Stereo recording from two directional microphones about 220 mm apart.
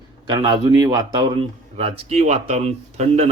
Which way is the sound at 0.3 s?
20° right (ahead or behind).